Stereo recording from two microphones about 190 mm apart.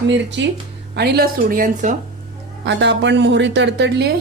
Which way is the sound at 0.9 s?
55° right (ahead or behind).